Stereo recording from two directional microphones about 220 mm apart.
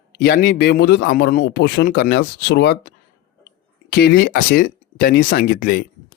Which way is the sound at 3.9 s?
45° left (ahead or behind).